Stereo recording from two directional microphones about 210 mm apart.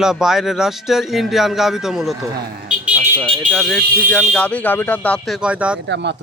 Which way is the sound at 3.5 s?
Centre (ahead or behind).